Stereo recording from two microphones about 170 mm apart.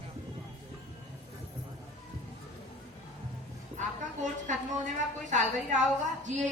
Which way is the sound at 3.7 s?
45° right (ahead or behind).